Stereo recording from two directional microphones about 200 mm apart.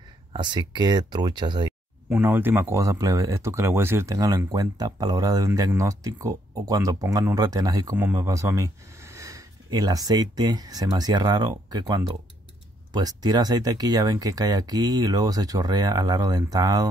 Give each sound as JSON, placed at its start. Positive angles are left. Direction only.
{"t": 0.3, "sound": "speech", "side_deg": -25}
{"t": 2.0, "sound": "speech", "side_deg": -5}